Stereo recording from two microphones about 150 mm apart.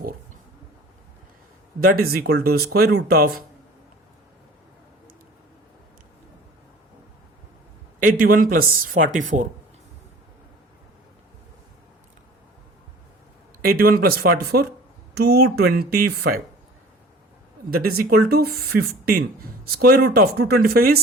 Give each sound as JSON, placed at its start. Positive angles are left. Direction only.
{"t": 1.8, "sound": "speech", "side_deg": -75}
{"t": 7.9, "sound": "speech", "side_deg": -65}
{"t": 13.6, "sound": "speech", "side_deg": -80}
{"t": 17.7, "sound": "speech", "side_deg": -85}